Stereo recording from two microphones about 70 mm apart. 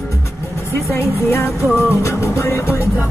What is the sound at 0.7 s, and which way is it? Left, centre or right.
Music, left.